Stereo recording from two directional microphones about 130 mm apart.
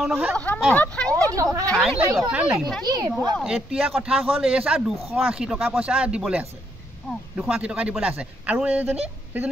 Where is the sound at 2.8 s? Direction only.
30° right (ahead or behind).